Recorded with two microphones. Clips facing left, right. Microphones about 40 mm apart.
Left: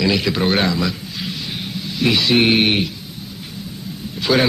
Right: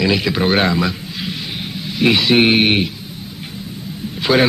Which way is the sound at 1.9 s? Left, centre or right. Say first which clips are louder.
Right 3 dB; centre.